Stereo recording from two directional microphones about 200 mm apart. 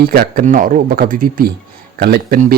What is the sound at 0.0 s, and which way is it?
Speech, 50° right (ahead or behind).